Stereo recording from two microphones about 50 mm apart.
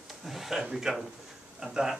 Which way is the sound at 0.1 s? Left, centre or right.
Centre.